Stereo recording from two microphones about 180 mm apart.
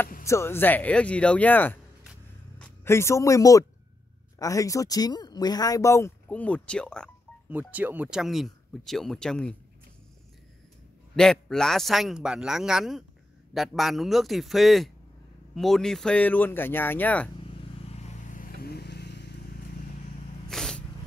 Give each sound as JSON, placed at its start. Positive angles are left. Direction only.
{"t": 0.2, "sound": "speech", "side_deg": 15}
{"t": 7.4, "sound": "speech", "side_deg": -10}
{"t": 11.1, "sound": "speech", "side_deg": 5}
{"t": 17.8, "sound": "vehicle", "side_deg": 40}
{"t": 20.4, "sound": "cat", "side_deg": 5}